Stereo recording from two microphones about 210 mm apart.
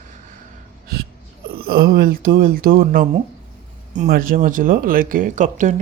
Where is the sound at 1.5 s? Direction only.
45° right (ahead or behind).